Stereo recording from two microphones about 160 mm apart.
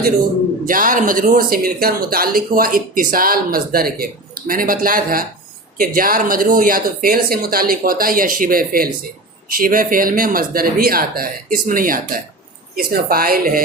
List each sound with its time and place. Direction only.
0.6 s speech: 55° right (ahead or behind)